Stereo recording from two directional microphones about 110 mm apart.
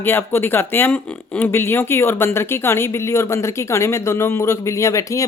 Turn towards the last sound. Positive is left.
turn(degrees=30)  # may be behind; listen again after turning